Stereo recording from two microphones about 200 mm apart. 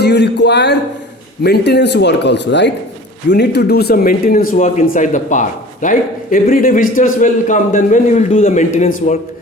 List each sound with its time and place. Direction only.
0.0 s music: 55° left (ahead or behind)
1.5 s a man's voice: 55° left (ahead or behind); by 8.9 s 35° left (ahead or behind)